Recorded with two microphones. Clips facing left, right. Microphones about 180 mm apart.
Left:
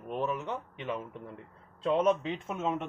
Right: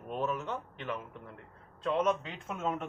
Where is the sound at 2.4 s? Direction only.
5° left (ahead or behind).